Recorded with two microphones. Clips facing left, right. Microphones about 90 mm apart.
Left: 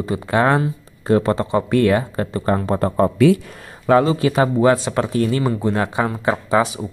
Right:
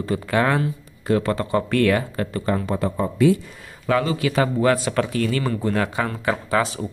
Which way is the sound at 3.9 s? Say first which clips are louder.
Left 6 dB; 30° left (ahead or behind).